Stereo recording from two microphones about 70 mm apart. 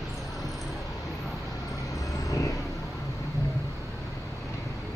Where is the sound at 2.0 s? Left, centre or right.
Left.